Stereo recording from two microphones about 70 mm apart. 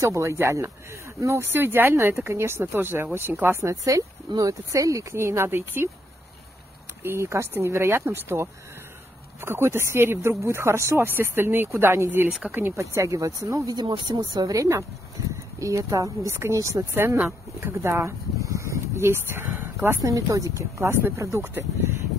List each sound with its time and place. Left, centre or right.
0.0 s speech: right
3.6 s speech: right
7.0 s speech: right
12.7 s speech: right
13.7 s speech: right
16.9 s speech: right
20.0 s speech: right